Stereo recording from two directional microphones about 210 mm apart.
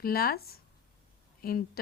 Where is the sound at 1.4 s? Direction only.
45° left (ahead or behind).